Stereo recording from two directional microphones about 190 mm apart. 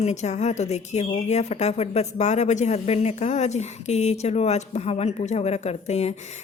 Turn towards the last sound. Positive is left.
turn(degrees=35)  # may be behind; listen again after turning